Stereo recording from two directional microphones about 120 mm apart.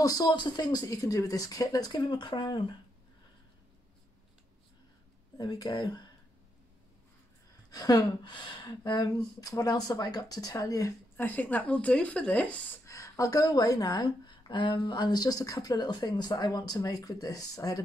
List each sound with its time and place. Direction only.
0.0 s a woman's voice: 35° left (ahead or behind)
5.4 s a woman's voice: 30° left (ahead or behind)
7.7 s a woman's voice: 30° left (ahead or behind)
11.1 s speech: 15° left (ahead or behind)
12.8 s a woman's voice: 25° left (ahead or behind)